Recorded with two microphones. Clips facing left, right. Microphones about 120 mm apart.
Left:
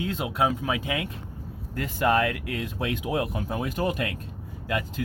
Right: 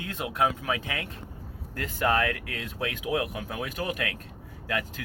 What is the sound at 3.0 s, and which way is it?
Speech, 30° left (ahead or behind).